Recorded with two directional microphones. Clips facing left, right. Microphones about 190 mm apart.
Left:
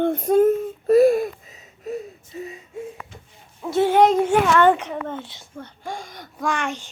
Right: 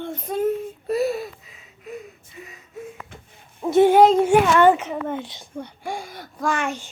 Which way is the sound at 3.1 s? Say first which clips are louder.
Right 1 dB; 55° right (ahead or behind).